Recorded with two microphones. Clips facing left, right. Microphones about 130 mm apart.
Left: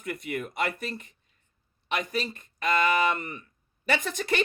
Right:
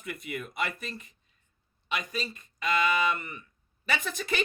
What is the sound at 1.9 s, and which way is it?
Speech, 55° left (ahead or behind).